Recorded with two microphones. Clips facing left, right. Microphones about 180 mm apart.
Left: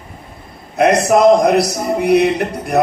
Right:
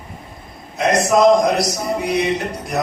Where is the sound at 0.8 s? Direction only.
60° left (ahead or behind).